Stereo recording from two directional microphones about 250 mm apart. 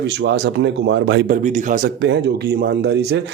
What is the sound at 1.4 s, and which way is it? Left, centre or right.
Speech, right.